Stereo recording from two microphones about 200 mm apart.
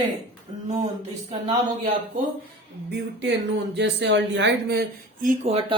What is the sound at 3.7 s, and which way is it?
Speech, 60° right (ahead or behind).